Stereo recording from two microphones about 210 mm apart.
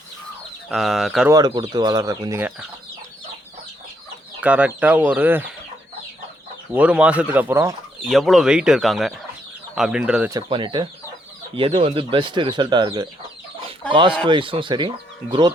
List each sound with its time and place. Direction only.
0.7 s speech: centre (ahead or behind)
1.3 s speech: 20° right (ahead or behind)
4.4 s speech: 5° right (ahead or behind)
6.7 s speech: 5° right (ahead or behind)
8.1 s speech: centre (ahead or behind)
10.3 s speech: 20° right (ahead or behind)
14.3 s speech: 25° right (ahead or behind)